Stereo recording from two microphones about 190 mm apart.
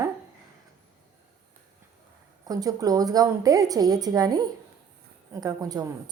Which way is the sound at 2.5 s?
20° right (ahead or behind).